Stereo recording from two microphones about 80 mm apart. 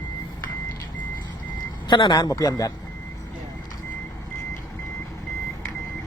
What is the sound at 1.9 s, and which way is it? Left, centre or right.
Speech, left.